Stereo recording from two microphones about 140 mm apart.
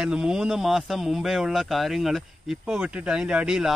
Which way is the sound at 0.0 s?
5° right (ahead or behind).